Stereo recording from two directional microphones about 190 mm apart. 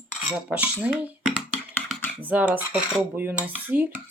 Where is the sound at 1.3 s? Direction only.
5° left (ahead or behind).